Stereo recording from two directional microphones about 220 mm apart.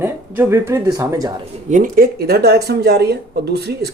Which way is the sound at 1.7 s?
40° right (ahead or behind).